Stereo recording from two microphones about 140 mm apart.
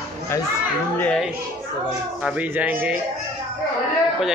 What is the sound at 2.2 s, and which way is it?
Speech, 5° right (ahead or behind).